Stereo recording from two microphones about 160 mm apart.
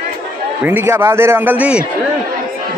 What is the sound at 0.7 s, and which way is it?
A man's voice, 15° right (ahead or behind).